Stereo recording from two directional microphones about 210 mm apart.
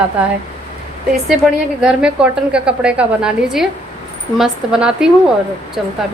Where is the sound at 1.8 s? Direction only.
5° right (ahead or behind).